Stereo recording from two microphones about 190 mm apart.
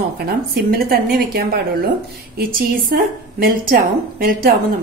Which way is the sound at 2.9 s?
55° right (ahead or behind).